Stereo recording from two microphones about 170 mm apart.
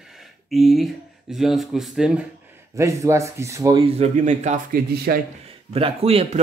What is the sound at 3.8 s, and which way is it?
Speech, 40° right (ahead or behind).